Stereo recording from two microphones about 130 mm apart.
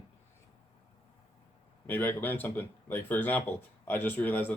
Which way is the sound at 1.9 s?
15° left (ahead or behind).